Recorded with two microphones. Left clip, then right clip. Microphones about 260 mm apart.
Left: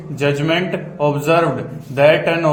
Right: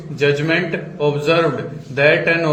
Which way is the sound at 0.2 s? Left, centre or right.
Left.